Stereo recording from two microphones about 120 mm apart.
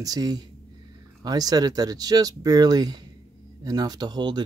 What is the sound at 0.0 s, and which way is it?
Speech, 30° right (ahead or behind).